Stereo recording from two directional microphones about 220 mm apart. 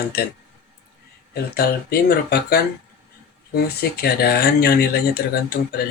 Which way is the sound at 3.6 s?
45° left (ahead or behind).